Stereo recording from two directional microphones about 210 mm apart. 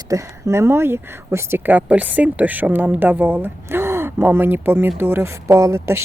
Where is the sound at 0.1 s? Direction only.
15° right (ahead or behind).